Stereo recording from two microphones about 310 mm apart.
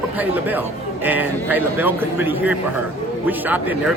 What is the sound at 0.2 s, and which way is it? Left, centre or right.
A man's voice, centre.